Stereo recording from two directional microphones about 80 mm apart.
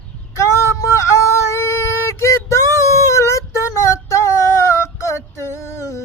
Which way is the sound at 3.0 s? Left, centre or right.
Left.